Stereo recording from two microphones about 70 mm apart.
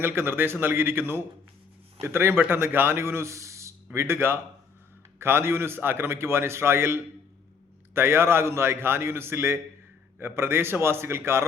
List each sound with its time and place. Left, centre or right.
0.0 s a man's voice: right
3.9 s a man's voice: right